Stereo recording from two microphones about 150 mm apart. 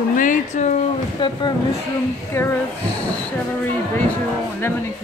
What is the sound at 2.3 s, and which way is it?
Speech, 15° left (ahead or behind).